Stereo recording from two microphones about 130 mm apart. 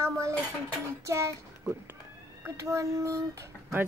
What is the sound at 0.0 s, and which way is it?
Dishes, 20° right (ahead or behind).